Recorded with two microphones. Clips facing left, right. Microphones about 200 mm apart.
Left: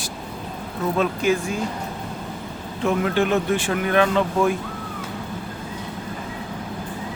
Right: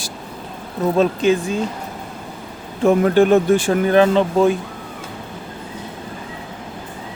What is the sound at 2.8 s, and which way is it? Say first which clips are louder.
Speech: right 7 dB; 45° right (ahead or behind).